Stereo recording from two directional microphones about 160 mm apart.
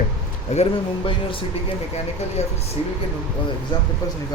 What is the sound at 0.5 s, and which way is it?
Speech, 45° left (ahead or behind).